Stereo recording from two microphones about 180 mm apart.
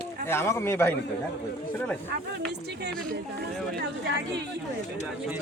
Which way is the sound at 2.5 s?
65° right (ahead or behind).